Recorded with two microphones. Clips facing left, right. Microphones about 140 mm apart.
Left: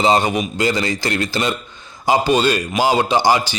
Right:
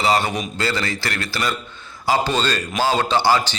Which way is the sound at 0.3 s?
5° left (ahead or behind).